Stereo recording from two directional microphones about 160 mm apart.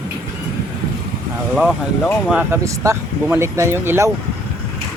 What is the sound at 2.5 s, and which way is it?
Speech, 15° right (ahead or behind).